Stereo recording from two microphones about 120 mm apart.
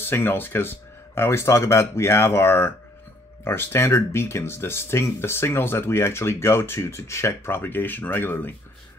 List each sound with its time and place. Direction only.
0.0 s speech: 20° left (ahead or behind)